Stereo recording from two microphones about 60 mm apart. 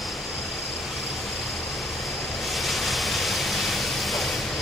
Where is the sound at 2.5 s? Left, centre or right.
Centre.